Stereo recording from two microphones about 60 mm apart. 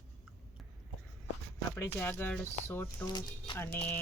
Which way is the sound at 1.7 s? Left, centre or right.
Left.